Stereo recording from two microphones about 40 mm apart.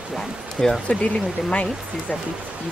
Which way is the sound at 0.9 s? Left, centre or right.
Left.